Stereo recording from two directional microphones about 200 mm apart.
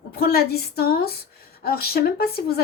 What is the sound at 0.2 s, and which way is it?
Speech, 50° left (ahead or behind).